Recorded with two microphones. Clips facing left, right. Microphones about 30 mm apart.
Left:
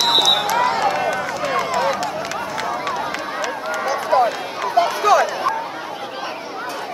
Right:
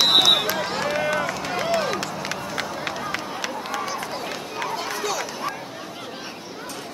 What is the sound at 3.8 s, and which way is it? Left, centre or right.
Run, centre.